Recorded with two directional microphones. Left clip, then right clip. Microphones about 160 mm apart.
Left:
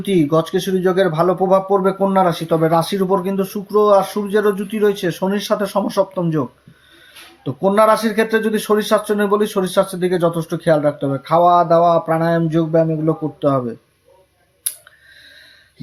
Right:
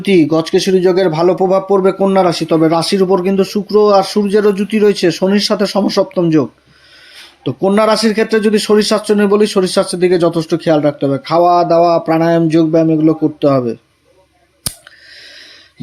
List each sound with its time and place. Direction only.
0.0 s speech: 25° right (ahead or behind)
7.4 s speech: 25° right (ahead or behind)